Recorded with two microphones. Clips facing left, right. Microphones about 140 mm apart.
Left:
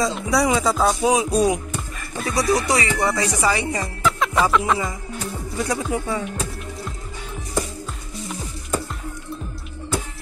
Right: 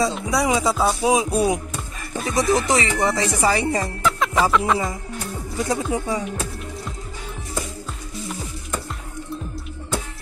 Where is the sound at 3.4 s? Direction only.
35° right (ahead or behind).